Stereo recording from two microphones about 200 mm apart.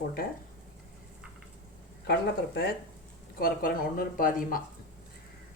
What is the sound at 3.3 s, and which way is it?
Speech, 45° left (ahead or behind).